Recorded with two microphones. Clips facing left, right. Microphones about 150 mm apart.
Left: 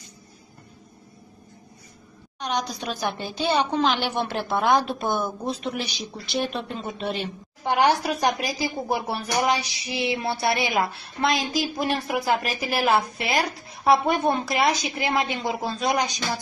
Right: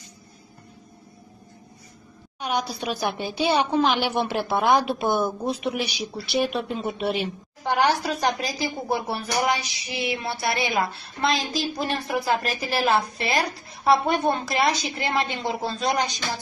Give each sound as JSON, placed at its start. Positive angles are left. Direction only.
{"t": 2.4, "sound": "a woman's voice", "side_deg": -5}
{"t": 7.6, "sound": "a woman's voice", "side_deg": 15}
{"t": 12.5, "sound": "a woman's voice", "side_deg": 5}